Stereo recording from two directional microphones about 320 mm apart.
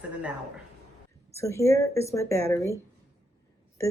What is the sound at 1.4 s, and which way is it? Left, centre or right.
Speech, centre.